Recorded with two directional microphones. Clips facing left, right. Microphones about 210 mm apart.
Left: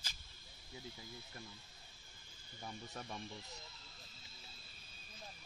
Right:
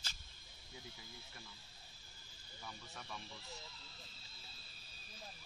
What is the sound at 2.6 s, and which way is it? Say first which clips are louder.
Speech: left 5 dB; 35° left (ahead or behind).